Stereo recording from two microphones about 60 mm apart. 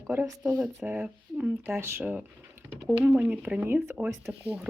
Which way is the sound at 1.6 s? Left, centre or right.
Right.